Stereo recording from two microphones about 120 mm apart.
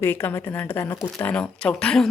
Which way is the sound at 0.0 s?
20° left (ahead or behind).